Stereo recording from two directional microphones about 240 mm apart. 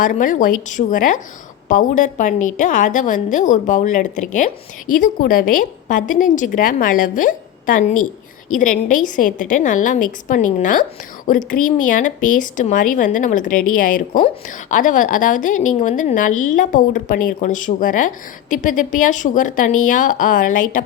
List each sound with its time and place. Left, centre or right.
0.0 s a woman's voice: left